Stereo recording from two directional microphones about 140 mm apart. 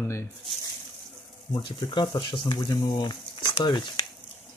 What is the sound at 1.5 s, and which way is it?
Speech, 35° left (ahead or behind).